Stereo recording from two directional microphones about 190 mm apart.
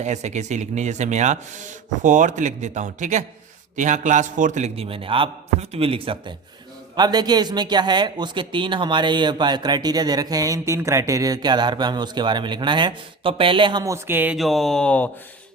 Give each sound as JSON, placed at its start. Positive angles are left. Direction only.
{"t": 0.0, "sound": "speech", "side_deg": -35}